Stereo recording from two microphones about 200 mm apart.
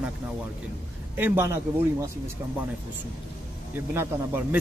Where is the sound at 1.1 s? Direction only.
10° right (ahead or behind).